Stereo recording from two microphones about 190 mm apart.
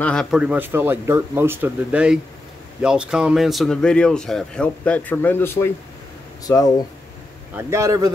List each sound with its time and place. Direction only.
0.0 s speech: 5° left (ahead or behind); by 6.7 s 20° left (ahead or behind)
7.5 s speech: 15° right (ahead or behind)